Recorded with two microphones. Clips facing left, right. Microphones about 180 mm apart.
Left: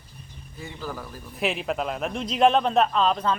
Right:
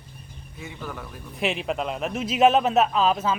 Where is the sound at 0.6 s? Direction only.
Centre (ahead or behind).